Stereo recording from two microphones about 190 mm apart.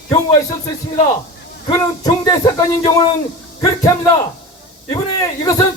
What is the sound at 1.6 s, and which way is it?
Speech, 20° left (ahead or behind).